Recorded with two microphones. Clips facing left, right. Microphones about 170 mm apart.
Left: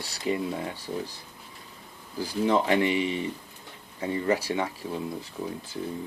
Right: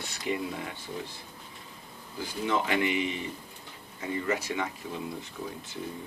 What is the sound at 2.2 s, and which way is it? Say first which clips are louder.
Speech: left 5 dB; 35° left (ahead or behind).